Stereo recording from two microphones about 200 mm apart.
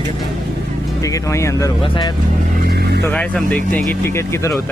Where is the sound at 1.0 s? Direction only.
15° left (ahead or behind).